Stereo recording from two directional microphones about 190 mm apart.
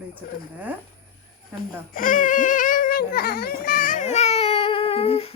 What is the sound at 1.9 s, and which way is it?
Speech, 45° left (ahead or behind).